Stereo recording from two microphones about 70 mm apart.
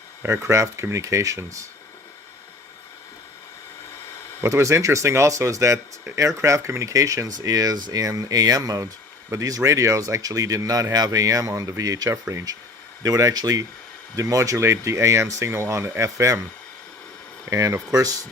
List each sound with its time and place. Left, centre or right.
0.2 s speech: right
4.4 s speech: right
17.5 s speech: right